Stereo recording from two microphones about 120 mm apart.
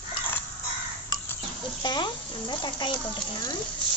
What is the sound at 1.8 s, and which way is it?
Sizzle, 35° left (ahead or behind).